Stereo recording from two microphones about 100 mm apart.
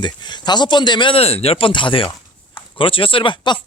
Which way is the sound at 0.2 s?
50° left (ahead or behind).